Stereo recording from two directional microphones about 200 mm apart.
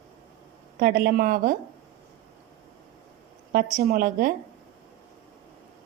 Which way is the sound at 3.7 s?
50° right (ahead or behind).